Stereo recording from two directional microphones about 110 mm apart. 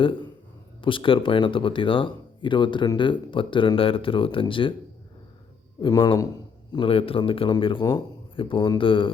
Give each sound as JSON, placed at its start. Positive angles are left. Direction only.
{"t": 0.0, "sound": "a man's voice", "side_deg": 50}
{"t": 5.9, "sound": "speech", "side_deg": 45}
{"t": 6.7, "sound": "speech", "side_deg": 55}